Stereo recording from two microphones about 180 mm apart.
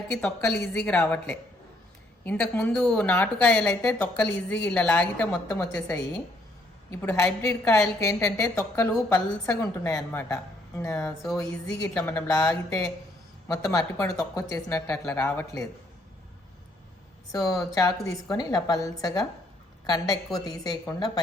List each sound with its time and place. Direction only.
0.2 s a woman's voice: 10° left (ahead or behind)
6.9 s a woman's voice: 10° left (ahead or behind)
12.5 s speech: 5° left (ahead or behind)
13.7 s a woman's voice: 20° left (ahead or behind)
14.8 s speech: 5° left (ahead or behind)
17.3 s a woman's voice: 20° left (ahead or behind)